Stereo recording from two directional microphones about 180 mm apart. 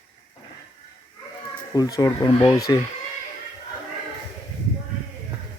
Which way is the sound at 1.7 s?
20° left (ahead or behind).